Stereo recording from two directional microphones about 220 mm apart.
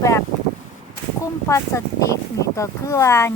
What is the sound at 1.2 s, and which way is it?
Speech, 15° left (ahead or behind).